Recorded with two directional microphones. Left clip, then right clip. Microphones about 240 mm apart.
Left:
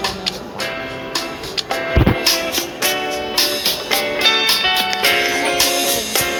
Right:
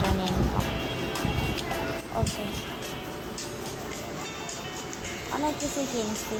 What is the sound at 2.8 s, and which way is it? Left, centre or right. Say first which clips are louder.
Music: left 17 dB; left.